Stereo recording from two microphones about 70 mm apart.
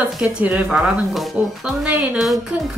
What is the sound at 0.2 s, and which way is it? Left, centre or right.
Speech, right.